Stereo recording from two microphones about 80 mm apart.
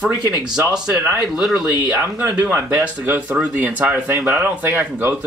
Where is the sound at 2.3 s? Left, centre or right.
Centre.